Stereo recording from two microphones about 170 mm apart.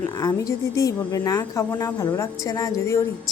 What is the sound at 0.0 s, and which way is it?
Speech, 20° left (ahead or behind).